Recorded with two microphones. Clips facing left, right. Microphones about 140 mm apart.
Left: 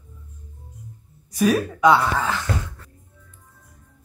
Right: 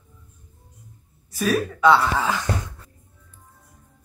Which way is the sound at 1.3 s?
15° left (ahead or behind).